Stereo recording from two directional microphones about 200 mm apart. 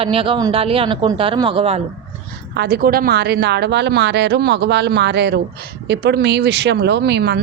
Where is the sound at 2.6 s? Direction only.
50° right (ahead or behind).